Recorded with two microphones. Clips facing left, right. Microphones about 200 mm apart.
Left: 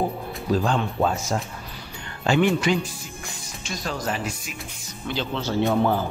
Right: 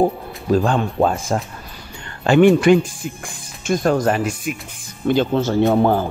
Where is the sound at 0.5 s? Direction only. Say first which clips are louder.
Right 6 dB; 50° right (ahead or behind).